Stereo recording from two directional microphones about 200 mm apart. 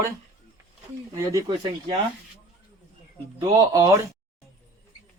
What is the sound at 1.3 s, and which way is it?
Speech, 20° right (ahead or behind).